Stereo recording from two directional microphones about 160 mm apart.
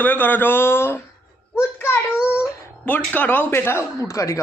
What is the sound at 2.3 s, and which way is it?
Speech, 15° left (ahead or behind).